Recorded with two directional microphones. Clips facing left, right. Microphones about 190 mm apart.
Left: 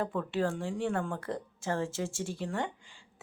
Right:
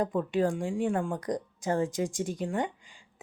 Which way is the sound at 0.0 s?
15° right (ahead or behind).